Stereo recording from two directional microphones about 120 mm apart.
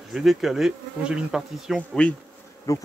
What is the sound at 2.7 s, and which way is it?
Speech, 25° left (ahead or behind).